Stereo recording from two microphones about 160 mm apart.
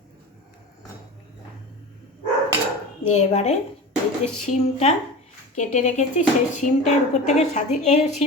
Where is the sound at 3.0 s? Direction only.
45° left (ahead or behind).